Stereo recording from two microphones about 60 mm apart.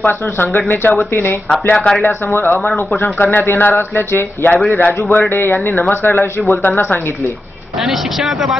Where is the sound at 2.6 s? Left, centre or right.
Centre.